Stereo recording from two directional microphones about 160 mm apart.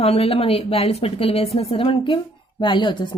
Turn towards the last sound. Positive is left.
turn(degrees=30)  # may be behind; listen again after turning